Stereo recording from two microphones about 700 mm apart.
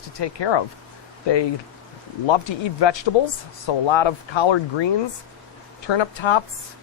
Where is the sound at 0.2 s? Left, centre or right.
Left.